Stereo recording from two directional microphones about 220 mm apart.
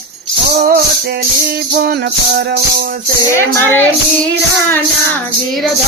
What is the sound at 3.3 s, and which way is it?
Speech, 10° left (ahead or behind).